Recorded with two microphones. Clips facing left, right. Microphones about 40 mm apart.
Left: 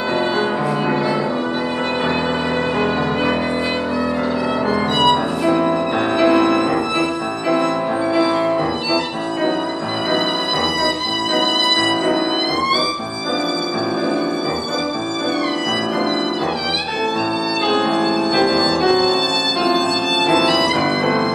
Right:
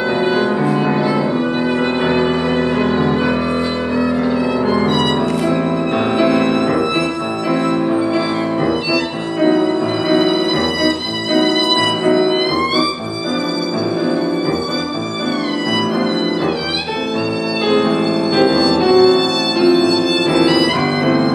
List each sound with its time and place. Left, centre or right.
0.2 s music: centre
6.1 s music: centre
8.9 s music: centre
11.4 s music: right
12.2 s music: centre
17.6 s music: centre